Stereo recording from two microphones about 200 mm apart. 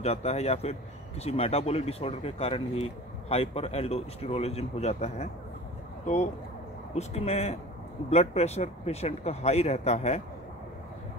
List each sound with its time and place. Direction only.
0.0 s speech: 30° left (ahead or behind)
6.9 s speech: 30° left (ahead or behind)